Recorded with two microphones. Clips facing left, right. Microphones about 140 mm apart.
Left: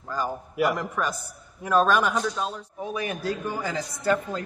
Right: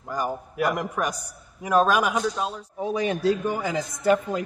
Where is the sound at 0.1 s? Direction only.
15° right (ahead or behind).